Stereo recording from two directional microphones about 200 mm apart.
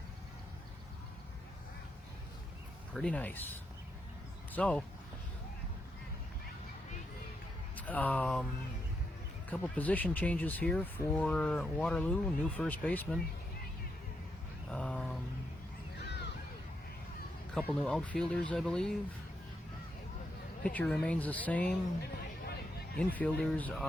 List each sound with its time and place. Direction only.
2.9 s speech: 5° left (ahead or behind)
7.8 s speech: 10° left (ahead or behind)
9.5 s speech: 10° left (ahead or behind)
14.7 s a sound: 5° left (ahead or behind)
16.0 s a sound: 55° left (ahead or behind)
17.7 s speech: 5° left (ahead or behind)
20.7 s speech: 5° left (ahead or behind)
23.0 s speech: 10° left (ahead or behind)